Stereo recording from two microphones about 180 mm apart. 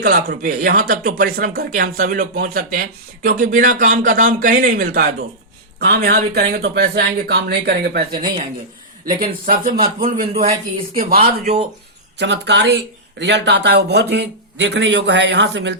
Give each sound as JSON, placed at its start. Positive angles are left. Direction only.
{"t": 0.0, "sound": "a man's voice", "side_deg": -55}
{"t": 9.0, "sound": "a man's voice", "side_deg": -50}
{"t": 12.2, "sound": "speech", "side_deg": -80}